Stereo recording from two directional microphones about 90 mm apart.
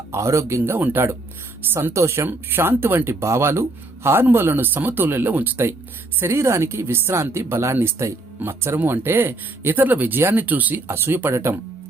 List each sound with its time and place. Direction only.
0.1 s speech: 35° right (ahead or behind)